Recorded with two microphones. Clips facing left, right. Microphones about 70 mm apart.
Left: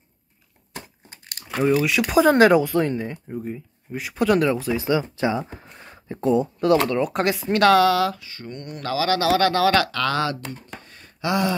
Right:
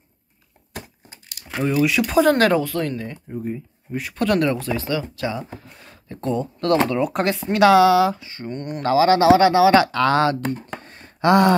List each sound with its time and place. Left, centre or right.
1.6 s speech: centre
2.3 s speech: centre
3.3 s speech: centre
4.7 s speech: centre
8.2 s speech: right
10.4 s a sound: right
11.2 s a sound: right